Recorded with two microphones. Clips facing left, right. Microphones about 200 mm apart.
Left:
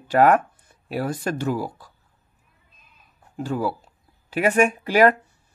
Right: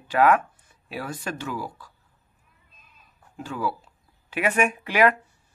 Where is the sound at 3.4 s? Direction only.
40° left (ahead or behind).